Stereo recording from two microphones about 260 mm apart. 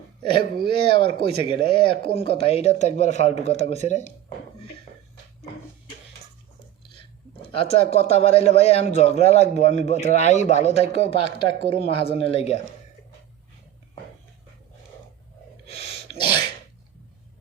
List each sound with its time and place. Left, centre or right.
0.2 s a man's voice: centre
7.4 s a man's voice: left
15.6 s sneeze: left